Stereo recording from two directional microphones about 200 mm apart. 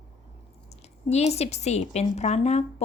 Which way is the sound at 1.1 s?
35° left (ahead or behind).